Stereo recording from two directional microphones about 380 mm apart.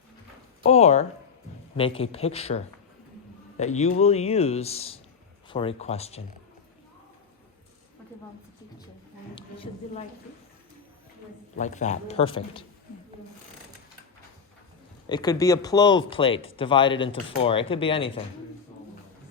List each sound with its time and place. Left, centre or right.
0.6 s a man's voice: centre
9.3 s a sound: centre
11.5 s a man's voice: centre
15.0 s a man's voice: centre